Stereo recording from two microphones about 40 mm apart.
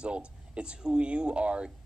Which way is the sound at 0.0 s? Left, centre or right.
Right.